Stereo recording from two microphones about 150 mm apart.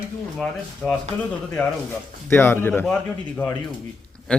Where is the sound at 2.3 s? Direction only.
15° left (ahead or behind).